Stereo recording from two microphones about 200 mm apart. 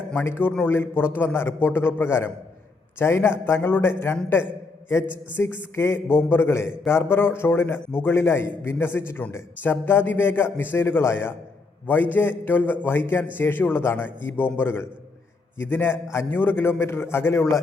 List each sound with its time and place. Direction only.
0.1 s a man's voice: 10° left (ahead or behind)